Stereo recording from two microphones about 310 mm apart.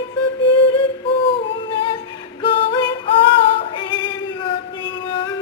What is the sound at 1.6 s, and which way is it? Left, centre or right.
Music, centre.